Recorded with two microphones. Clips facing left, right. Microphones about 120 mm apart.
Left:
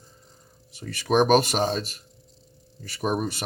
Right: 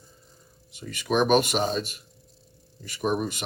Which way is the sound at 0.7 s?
40° left (ahead or behind).